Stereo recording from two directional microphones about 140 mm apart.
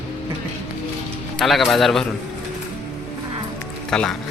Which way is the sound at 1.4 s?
Centre (ahead or behind).